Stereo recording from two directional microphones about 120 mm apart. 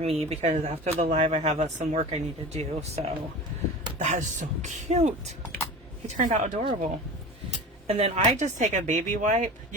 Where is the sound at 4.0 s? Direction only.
90° right; by 5.3 s 70° right (ahead or behind).